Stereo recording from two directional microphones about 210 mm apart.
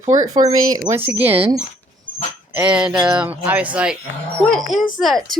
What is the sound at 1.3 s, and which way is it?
Speech, 25° right (ahead or behind).